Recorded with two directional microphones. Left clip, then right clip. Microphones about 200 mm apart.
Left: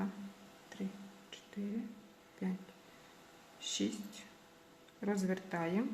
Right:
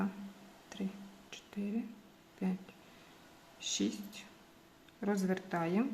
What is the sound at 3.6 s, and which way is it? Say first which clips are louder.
Speech: right 2 dB; 15° right (ahead or behind).